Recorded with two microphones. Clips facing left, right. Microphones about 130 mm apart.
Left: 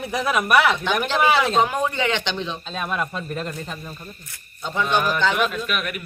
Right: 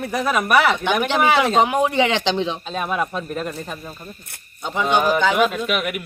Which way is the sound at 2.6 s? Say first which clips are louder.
Right 3 dB; 5° right (ahead or behind).